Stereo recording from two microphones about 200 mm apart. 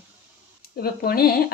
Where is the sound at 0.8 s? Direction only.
50° left (ahead or behind).